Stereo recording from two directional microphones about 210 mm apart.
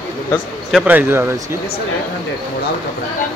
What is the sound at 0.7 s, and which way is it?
Speech, 5° right (ahead or behind).